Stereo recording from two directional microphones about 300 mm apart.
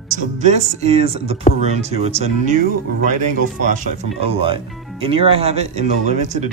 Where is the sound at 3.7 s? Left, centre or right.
Right.